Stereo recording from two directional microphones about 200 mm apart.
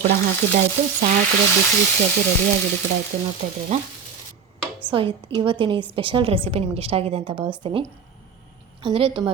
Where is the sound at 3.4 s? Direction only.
40° right (ahead or behind).